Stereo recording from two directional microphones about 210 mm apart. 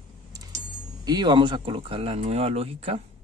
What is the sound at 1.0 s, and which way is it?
Speech, 20° right (ahead or behind).